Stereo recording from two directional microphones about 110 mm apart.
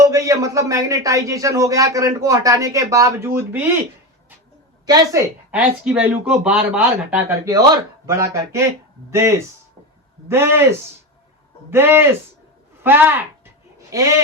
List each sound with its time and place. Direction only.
0.0 s speech: 30° right (ahead or behind)
4.9 s speech: 35° right (ahead or behind)
5.5 s speech: 10° right (ahead or behind)
7.4 s a woman's voice: 30° right (ahead or behind)
13.9 s speech: 30° right (ahead or behind)